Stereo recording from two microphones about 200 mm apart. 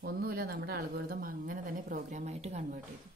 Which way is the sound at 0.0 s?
50° right (ahead or behind).